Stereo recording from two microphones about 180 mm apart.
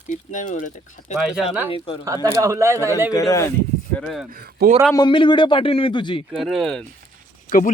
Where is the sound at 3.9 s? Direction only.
Centre (ahead or behind).